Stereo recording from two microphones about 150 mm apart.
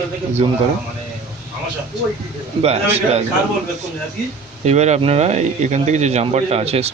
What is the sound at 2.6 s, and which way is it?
Speech, 45° right (ahead or behind).